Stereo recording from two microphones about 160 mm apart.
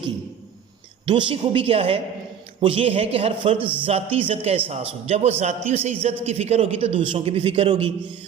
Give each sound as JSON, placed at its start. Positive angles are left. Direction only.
{"t": 1.0, "sound": "a man's voice", "side_deg": -35}